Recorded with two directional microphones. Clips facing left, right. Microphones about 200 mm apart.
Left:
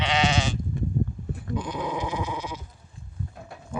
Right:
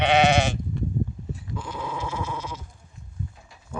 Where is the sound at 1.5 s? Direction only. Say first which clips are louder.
Left 4 dB; 15° left (ahead or behind).